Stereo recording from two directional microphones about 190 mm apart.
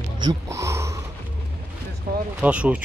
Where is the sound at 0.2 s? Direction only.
20° right (ahead or behind).